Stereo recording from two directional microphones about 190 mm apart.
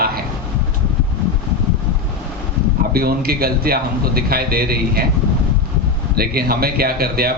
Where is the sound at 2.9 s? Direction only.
55° right (ahead or behind).